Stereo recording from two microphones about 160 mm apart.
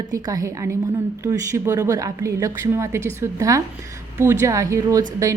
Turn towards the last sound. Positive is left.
turn(degrees=-20)  # may be behind; listen again after turning